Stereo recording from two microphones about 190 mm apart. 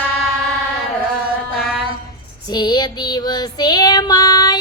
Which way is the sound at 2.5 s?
20° left (ahead or behind).